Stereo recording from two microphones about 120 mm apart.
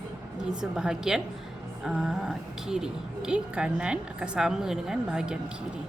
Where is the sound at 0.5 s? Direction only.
5° right (ahead or behind).